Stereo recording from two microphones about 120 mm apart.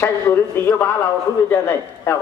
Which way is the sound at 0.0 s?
20° left (ahead or behind).